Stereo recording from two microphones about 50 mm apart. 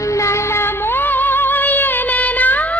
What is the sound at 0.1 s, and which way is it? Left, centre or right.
Music, left.